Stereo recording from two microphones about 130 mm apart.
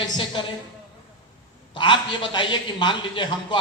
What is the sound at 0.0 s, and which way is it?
Speech, 40° left (ahead or behind).